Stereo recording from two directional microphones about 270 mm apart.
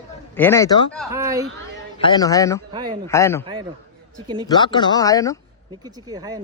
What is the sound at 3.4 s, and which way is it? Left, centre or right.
Speech, centre.